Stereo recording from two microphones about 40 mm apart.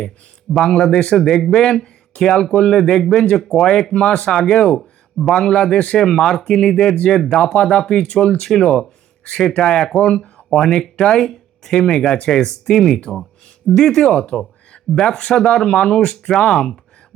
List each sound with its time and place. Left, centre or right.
0.6 s speech: centre
1.5 s speech: left
3.9 s speech: left
6.0 s speech: centre
7.5 s speech: left
8.4 s speech: centre
11.3 s a sound: centre
11.8 s speech: centre